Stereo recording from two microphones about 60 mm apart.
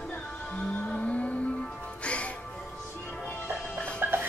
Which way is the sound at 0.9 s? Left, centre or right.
Left.